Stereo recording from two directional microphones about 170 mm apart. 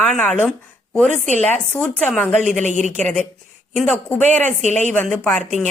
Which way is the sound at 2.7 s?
45° left (ahead or behind).